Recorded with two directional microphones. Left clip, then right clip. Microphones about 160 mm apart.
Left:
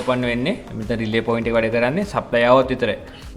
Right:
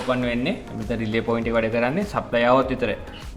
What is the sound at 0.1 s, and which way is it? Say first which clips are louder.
A man's voice: left 3 dB; 40° left (ahead or behind).